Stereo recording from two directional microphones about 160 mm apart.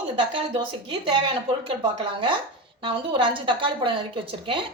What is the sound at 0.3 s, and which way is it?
Speech, 35° right (ahead or behind).